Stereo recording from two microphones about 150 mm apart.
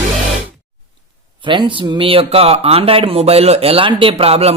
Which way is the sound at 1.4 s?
35° right (ahead or behind).